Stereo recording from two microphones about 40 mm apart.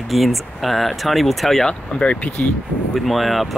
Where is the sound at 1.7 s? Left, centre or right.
Left.